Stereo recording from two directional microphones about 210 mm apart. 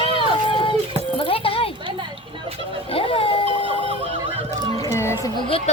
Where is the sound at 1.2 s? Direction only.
25° left (ahead or behind).